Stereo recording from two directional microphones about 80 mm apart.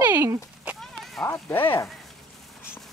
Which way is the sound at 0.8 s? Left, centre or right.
Centre.